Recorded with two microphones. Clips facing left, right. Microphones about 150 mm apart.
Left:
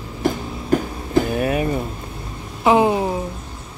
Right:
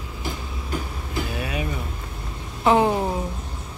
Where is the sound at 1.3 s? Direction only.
45° left (ahead or behind).